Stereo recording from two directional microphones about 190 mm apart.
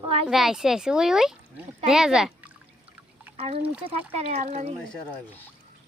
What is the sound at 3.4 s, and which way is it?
Speech, 30° right (ahead or behind).